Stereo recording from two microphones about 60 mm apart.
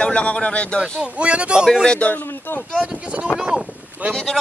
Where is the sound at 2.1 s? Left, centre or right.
Left.